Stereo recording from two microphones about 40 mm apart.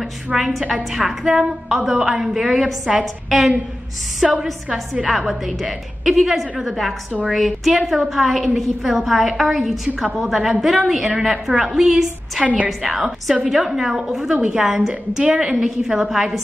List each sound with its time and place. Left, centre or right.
0.4 s a woman's voice: centre